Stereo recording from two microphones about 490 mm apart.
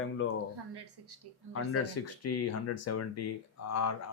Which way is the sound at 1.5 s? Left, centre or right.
Left.